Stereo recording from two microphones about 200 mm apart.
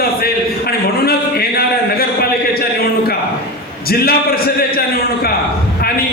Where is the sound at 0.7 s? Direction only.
50° left (ahead or behind).